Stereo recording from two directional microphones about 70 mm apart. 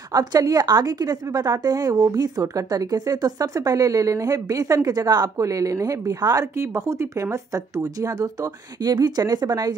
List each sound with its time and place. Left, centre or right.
0.1 s a woman's voice: right
5.4 s speech: right
6.6 s speech: right